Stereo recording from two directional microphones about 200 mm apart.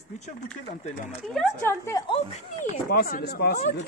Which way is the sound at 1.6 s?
15° left (ahead or behind).